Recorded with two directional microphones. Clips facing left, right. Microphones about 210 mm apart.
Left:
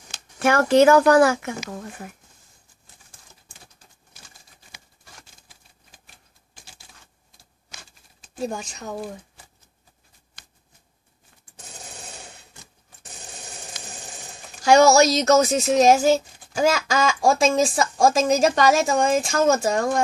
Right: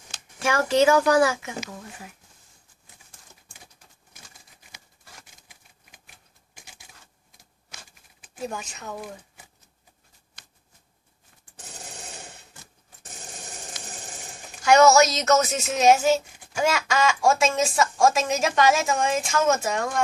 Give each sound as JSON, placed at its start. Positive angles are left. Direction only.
{"t": 0.4, "sound": "speech", "side_deg": 55}
{"t": 5.2, "sound": "a sound", "side_deg": -15}
{"t": 8.4, "sound": "speech", "side_deg": 30}
{"t": 14.6, "sound": "a woman's voice", "side_deg": 35}